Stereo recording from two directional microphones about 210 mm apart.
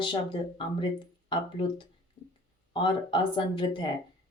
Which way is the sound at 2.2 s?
25° left (ahead or behind).